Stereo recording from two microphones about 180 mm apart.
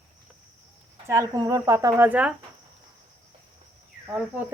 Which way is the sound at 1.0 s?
15° right (ahead or behind).